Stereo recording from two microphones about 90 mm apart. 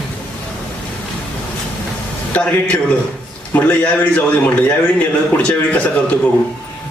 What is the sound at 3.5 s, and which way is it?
A man's voice, 15° left (ahead or behind).